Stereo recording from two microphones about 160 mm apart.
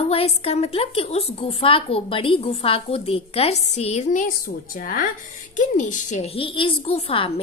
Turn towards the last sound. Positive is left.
turn(degrees=35)  # may be behind; listen again after turning